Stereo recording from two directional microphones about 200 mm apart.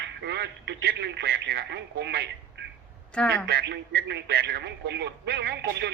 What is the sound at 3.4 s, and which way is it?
Speech, 55° right (ahead or behind).